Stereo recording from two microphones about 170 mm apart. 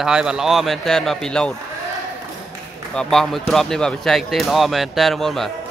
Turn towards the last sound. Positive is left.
turn(degrees=0)  # may be behind; listen again after turning